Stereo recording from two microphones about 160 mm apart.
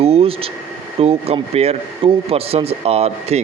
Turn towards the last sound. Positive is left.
turn(degrees=-40)  # may be behind; listen again after turning